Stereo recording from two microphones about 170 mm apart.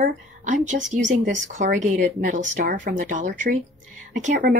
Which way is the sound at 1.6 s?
45° right (ahead or behind).